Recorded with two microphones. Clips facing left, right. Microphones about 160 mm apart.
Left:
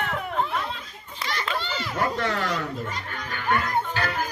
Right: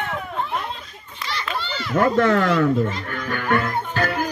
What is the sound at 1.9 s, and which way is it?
Music, 50° right (ahead or behind).